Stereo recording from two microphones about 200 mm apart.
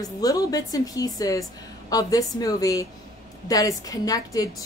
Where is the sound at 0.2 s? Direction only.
20° left (ahead or behind).